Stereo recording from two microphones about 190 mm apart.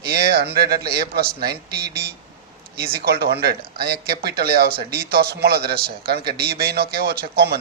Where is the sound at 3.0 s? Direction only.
55° right (ahead or behind).